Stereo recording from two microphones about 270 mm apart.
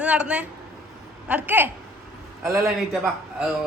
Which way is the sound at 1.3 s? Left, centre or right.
Centre.